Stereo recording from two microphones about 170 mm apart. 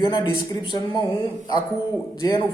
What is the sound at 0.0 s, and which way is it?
Speech, 25° left (ahead or behind).